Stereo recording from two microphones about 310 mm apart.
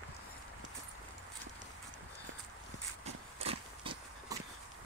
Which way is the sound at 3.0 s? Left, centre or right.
Centre.